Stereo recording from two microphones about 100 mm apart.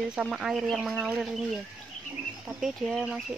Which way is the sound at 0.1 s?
5° right (ahead or behind).